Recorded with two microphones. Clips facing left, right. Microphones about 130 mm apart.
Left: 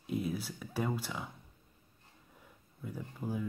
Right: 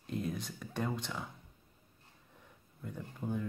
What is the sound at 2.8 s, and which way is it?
Speech, 5° left (ahead or behind).